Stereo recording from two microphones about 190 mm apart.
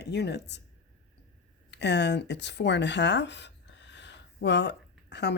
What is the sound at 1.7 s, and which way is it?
Speech, 65° left (ahead or behind).